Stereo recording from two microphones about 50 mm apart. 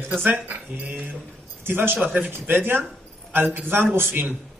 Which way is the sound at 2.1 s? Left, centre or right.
Right.